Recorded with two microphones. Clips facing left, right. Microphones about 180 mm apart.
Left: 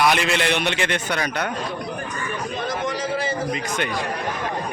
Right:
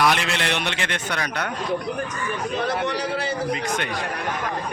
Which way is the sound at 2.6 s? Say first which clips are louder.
Even; 65° right (ahead or behind).